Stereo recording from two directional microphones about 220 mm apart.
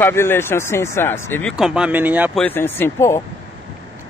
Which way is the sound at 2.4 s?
10° left (ahead or behind).